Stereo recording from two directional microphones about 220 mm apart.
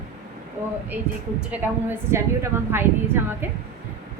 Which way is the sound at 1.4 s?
10° right (ahead or behind).